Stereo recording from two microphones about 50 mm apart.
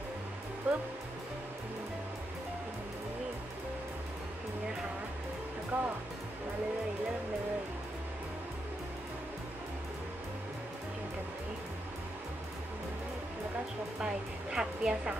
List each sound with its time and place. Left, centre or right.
0.7 s speech: right
5.7 s speech: right
14.0 s music: centre